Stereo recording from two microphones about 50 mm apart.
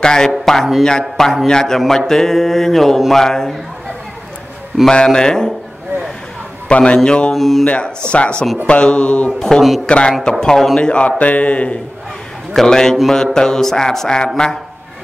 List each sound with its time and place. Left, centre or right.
0.0 s speech: centre
4.8 s speech: centre
6.7 s a man's voice: left
7.3 s speech: centre
7.6 s a man's voice: left
10.4 s speech: centre
10.8 s a man's voice: left
12.5 s speech: centre